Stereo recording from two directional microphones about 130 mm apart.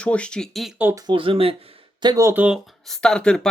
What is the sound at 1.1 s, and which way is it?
Speech, 45° right (ahead or behind).